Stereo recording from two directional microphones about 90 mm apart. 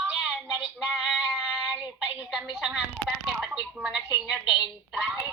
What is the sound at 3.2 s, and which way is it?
A woman's voice, 10° right (ahead or behind).